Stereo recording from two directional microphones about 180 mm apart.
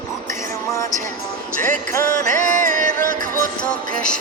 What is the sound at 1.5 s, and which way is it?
Music, 45° right (ahead or behind).